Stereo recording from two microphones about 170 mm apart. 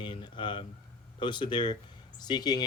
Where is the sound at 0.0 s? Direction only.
30° left (ahead or behind).